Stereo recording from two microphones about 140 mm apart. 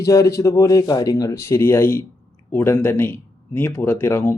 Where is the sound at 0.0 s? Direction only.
20° left (ahead or behind).